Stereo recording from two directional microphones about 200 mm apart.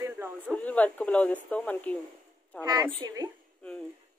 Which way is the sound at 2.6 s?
20° right (ahead or behind).